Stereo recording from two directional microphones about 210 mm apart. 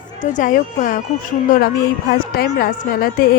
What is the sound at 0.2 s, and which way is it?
A woman's voice, 35° left (ahead or behind).